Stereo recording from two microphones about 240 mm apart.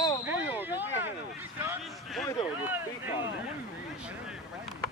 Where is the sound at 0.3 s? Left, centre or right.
Centre.